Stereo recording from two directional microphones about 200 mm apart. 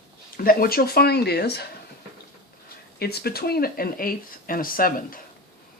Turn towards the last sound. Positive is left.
turn(degrees=45)  # may be behind; listen again after turning